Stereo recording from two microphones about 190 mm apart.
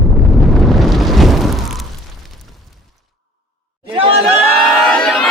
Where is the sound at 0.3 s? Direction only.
Centre (ahead or behind).